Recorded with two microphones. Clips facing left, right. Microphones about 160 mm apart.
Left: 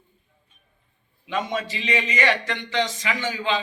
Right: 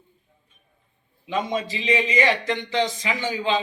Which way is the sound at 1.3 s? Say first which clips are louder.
Right 1 dB; 35° right (ahead or behind).